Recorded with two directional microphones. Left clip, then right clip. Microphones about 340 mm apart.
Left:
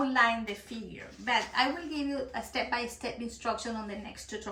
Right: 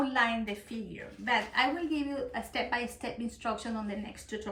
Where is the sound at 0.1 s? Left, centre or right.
Centre.